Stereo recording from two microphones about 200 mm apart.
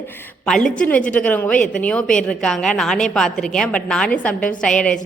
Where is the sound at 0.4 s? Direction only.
5° left (ahead or behind).